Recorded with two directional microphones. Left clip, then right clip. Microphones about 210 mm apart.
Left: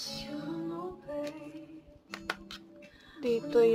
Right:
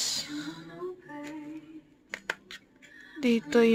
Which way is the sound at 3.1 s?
45° right (ahead or behind).